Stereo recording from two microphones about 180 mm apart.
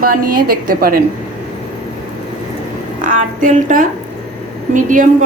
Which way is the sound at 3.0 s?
45° right (ahead or behind).